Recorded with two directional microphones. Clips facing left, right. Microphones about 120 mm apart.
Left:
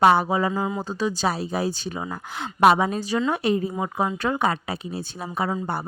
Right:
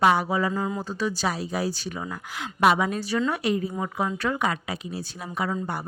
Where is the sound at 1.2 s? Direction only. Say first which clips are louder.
Left 3 dB; 30° left (ahead or behind).